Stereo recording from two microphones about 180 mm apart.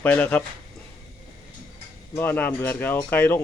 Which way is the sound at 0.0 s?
10° left (ahead or behind).